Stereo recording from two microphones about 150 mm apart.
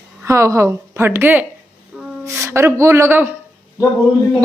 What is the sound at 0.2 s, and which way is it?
A woman's voice, 20° right (ahead or behind).